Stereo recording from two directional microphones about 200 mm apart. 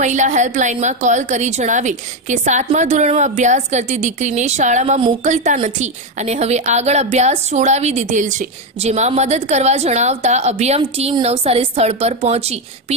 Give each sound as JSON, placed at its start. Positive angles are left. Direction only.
{"t": 0.0, "sound": "a woman's voice", "side_deg": -35}